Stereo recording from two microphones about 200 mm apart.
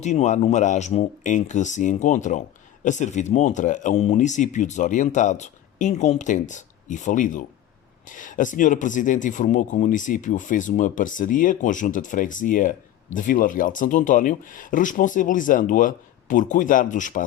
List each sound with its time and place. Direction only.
0.0 s speech: 35° left (ahead or behind)